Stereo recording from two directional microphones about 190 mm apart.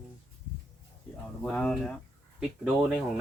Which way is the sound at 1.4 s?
5° left (ahead or behind).